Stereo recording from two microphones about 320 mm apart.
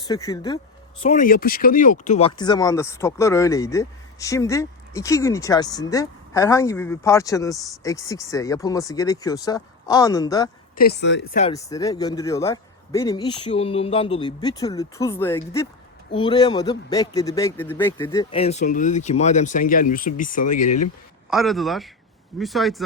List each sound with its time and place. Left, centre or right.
0.0 s speech: centre
1.0 s speech: left
10.8 s a man's voice: left
11.5 s a man's voice: centre
21.2 s a man's voice: centre